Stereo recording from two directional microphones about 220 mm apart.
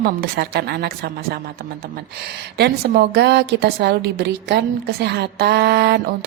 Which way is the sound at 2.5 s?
50° right (ahead or behind).